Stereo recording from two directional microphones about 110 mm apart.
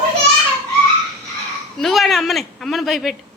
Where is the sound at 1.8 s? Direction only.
Centre (ahead or behind).